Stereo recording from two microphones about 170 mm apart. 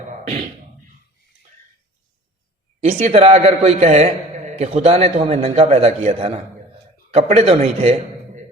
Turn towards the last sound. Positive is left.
turn(degrees=-40)  # may be behind; listen again after turning